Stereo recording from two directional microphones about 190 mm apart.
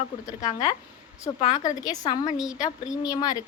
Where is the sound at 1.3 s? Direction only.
30° left (ahead or behind).